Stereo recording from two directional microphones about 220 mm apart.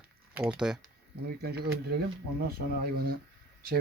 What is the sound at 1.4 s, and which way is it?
Speech, 45° right (ahead or behind).